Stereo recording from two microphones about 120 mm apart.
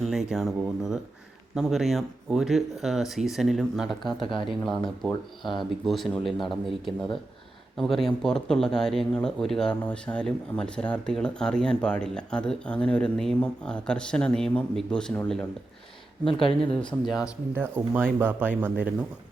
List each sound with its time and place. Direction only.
0.0 s speech: 5° right (ahead or behind)
4.2 s speech: 45° left (ahead or behind)
5.0 s speech: centre (ahead or behind)
16.2 s speech: 50° left (ahead or behind)
16.6 s speech: 5° left (ahead or behind)
17.5 s speech: 15° right (ahead or behind)